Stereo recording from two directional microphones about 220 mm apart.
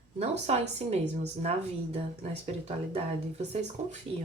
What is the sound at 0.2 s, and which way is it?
A woman's voice, 30° right (ahead or behind).